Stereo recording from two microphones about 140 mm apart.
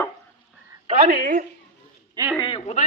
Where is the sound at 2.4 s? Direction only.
40° left (ahead or behind).